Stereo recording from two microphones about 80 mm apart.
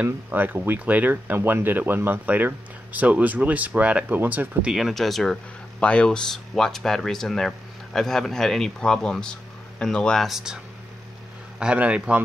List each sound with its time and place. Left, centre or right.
0.0 s speech: right
4.7 s speech: centre
5.8 s speech: centre
10.2 s a man's voice: centre
11.6 s a man's voice: centre